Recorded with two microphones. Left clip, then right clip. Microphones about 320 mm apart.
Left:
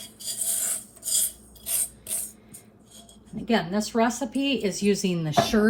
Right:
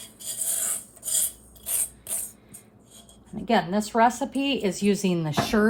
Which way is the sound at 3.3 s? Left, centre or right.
Right.